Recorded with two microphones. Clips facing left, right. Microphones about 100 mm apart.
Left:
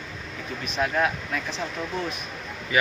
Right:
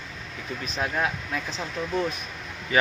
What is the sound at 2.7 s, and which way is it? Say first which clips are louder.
Speech: right 2 dB; 35° right (ahead or behind).